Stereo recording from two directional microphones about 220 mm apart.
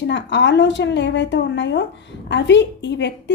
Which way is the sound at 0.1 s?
55° left (ahead or behind).